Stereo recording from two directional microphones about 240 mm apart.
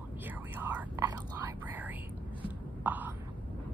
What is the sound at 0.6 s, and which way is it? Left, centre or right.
Whispering, centre.